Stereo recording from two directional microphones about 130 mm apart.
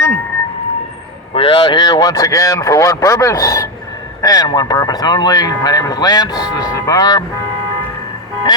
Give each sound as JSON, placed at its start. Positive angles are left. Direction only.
{"t": 1.3, "sound": "a man's voice", "side_deg": 40}